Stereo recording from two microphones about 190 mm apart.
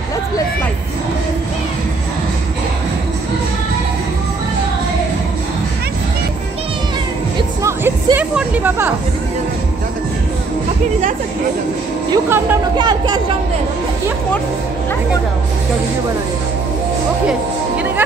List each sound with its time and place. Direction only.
7.3 s music: 15° right (ahead or behind)
12.1 s speech: 10° right (ahead or behind)
12.7 s speech: 20° right (ahead or behind)